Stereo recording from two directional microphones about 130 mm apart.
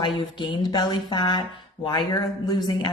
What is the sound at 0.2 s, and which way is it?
Speech, 35° left (ahead or behind).